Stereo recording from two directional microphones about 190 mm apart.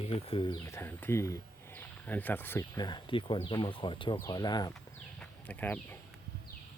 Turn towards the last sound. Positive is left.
turn(degrees=10)  # may be behind; listen again after turning